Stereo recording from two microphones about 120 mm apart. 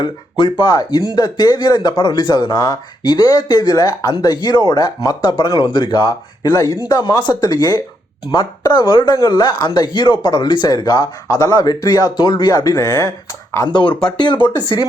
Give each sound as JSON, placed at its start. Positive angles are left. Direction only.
{"t": 0.0, "sound": "speech", "side_deg": 40}
{"t": 14.2, "sound": "speech", "side_deg": 40}